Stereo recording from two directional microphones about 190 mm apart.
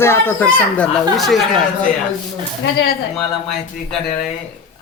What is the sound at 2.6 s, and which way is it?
Speech, 60° left (ahead or behind).